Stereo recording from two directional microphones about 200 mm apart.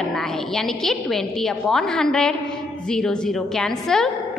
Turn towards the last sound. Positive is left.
turn(degrees=0)  # may be behind; listen again after turning